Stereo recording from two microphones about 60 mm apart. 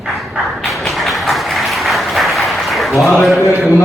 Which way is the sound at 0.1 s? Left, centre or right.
Centre.